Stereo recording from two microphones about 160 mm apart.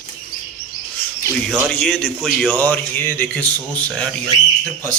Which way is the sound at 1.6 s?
5° left (ahead or behind).